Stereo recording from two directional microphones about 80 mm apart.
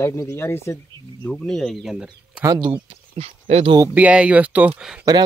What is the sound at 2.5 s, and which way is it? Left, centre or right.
Speech, right.